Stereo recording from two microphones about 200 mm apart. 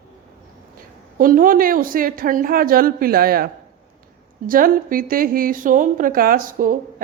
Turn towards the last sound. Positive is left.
turn(degrees=-40)  # may be behind; listen again after turning